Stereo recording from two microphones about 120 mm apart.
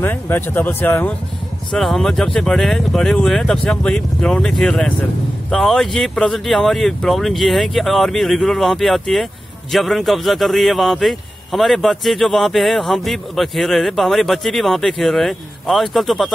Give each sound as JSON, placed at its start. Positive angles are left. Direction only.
{"t": 0.0, "sound": "speech", "side_deg": 20}
{"t": 1.7, "sound": "speech", "side_deg": 0}